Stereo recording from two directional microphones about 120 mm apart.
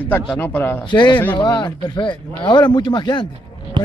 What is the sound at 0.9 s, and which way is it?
Speech, 40° left (ahead or behind).